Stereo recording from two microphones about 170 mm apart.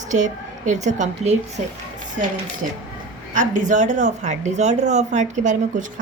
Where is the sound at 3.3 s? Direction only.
50° right (ahead or behind).